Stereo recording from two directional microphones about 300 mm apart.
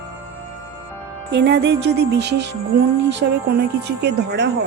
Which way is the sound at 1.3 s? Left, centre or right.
Right.